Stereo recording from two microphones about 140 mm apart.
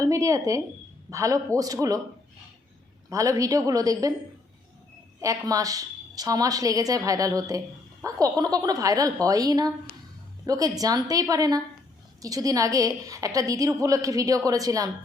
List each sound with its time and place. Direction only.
0.0 s a woman's voice: 25° right (ahead or behind)
3.1 s a woman's voice: 25° right (ahead or behind)
5.2 s a woman's voice: 25° right (ahead or behind)